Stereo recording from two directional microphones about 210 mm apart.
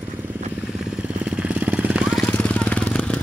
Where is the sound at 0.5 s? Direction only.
5° right (ahead or behind).